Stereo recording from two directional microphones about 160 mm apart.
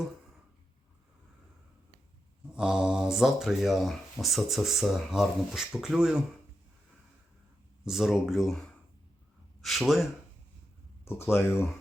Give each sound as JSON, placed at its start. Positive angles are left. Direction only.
{"t": 2.6, "sound": "speech", "side_deg": -5}
{"t": 7.9, "sound": "speech", "side_deg": -5}
{"t": 11.0, "sound": "speech", "side_deg": 15}